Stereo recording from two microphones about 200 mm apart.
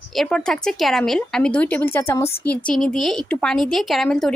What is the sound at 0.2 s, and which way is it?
A woman's voice, 5° left (ahead or behind).